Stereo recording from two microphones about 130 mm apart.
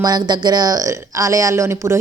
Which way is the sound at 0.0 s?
30° right (ahead or behind).